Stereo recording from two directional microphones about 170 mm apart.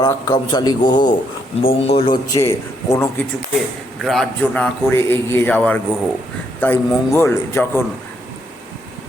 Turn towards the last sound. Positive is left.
turn(degrees=15)  # may be behind; listen again after turning